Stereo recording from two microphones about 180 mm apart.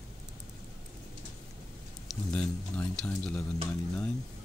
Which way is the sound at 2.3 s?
5° left (ahead or behind).